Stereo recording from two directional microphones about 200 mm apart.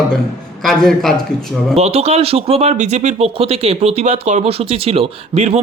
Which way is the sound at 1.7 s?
30° right (ahead or behind).